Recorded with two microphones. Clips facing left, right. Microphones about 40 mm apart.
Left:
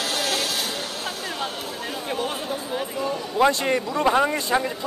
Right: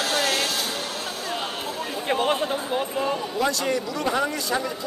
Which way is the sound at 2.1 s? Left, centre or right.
Right.